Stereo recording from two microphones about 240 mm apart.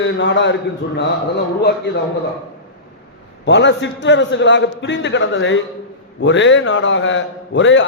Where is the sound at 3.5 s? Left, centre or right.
Left.